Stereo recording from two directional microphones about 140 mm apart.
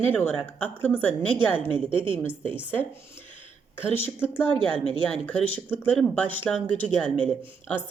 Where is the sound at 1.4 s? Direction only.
35° right (ahead or behind).